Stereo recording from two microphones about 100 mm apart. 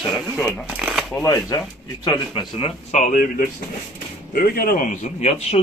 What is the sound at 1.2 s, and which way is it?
Speech, 35° left (ahead or behind).